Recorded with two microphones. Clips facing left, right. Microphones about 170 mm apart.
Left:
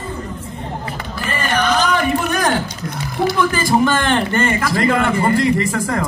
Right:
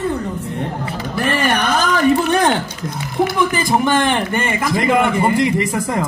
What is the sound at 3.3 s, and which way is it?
A man's voice, 15° right (ahead or behind).